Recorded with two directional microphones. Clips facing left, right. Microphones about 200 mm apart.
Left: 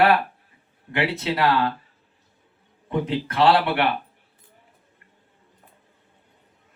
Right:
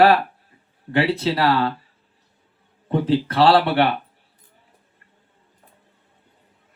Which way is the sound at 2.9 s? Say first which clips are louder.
Right 5 dB; 35° right (ahead or behind).